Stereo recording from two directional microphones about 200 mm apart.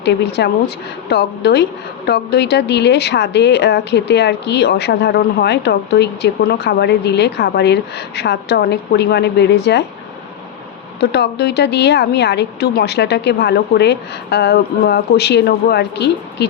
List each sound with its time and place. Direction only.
0.0 s speech: 60° left (ahead or behind)
11.0 s speech: 55° left (ahead or behind)